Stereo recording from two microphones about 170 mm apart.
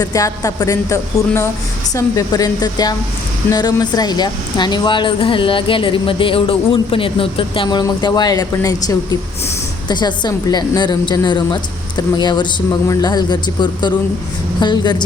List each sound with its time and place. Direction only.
0.0 s speech: 20° left (ahead or behind)